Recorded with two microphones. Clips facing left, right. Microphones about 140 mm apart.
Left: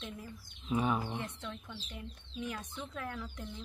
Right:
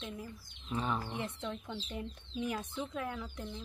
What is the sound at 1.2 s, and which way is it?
Speech, 25° right (ahead or behind).